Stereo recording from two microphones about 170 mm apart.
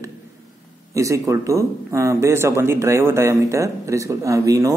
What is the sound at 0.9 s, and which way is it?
A man's voice, 20° right (ahead or behind).